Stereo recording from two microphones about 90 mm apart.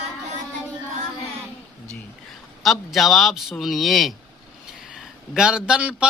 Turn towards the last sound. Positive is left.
turn(degrees=-10)  # may be behind; listen again after turning